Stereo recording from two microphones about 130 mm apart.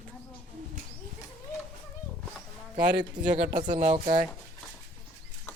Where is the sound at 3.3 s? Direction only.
75° right (ahead or behind).